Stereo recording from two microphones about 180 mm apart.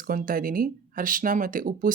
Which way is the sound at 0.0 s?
50° right (ahead or behind).